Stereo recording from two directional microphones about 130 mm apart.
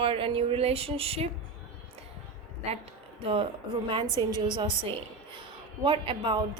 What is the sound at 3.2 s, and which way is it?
A woman's voice, 45° right (ahead or behind).